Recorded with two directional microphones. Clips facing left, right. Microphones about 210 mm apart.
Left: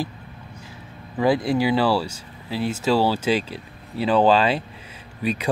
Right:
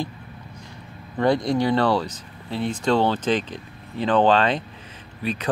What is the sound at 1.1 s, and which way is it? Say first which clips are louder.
Speech: even; 5° left (ahead or behind).